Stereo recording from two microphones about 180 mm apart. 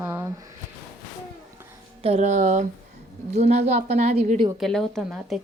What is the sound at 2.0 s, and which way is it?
A woman's voice, 40° right (ahead or behind).